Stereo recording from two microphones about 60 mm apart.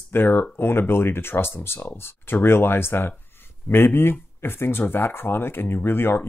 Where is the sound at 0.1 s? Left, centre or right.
Left.